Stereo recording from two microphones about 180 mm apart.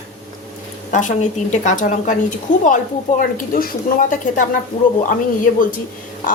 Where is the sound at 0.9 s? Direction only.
45° left (ahead or behind).